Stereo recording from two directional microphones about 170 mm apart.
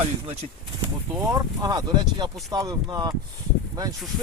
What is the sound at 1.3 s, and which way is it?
Speech, 20° right (ahead or behind).